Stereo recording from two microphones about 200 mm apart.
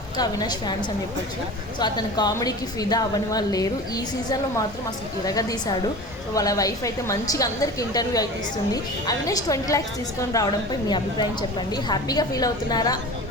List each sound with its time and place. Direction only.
0.2 s a woman's voice: 20° left (ahead or behind)